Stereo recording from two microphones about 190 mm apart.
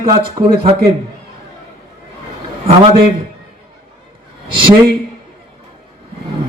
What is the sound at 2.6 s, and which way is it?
Speech, 25° right (ahead or behind).